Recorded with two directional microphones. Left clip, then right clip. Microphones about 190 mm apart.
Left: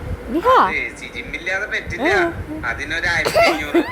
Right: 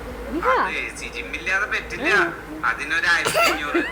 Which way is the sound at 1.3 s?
35° right (ahead or behind).